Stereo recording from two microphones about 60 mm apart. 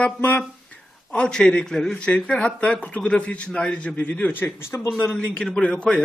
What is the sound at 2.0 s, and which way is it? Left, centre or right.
A man's voice, left.